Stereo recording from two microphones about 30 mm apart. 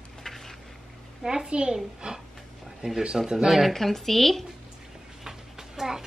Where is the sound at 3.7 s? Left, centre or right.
Centre.